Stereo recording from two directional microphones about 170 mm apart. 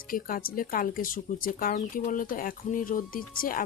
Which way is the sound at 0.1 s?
55° left (ahead or behind).